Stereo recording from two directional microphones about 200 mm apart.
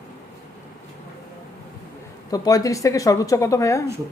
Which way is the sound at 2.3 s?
20° left (ahead or behind).